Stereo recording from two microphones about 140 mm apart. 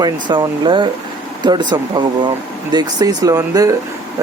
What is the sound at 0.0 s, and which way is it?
Speech, 35° right (ahead or behind).